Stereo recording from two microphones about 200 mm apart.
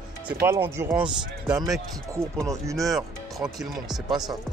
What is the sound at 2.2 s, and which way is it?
Speech, 30° right (ahead or behind).